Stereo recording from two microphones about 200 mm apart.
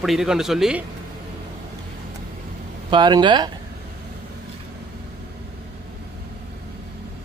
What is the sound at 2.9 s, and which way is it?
Speech, 20° right (ahead or behind).